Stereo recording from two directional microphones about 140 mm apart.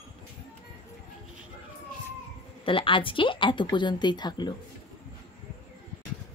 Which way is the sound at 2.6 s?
40° left (ahead or behind).